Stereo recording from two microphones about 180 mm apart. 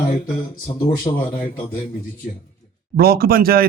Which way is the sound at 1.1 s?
30° left (ahead or behind).